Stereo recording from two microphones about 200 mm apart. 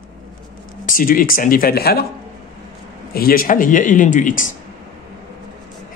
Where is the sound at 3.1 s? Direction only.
50° left (ahead or behind).